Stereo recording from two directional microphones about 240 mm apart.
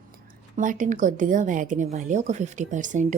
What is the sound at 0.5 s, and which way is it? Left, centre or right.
Speech, right.